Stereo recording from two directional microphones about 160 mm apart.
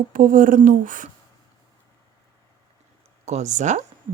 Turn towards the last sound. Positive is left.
turn(degrees=-50)  # may be behind; listen again after turning